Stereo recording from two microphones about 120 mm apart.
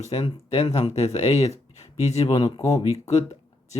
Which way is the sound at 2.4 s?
30° left (ahead or behind).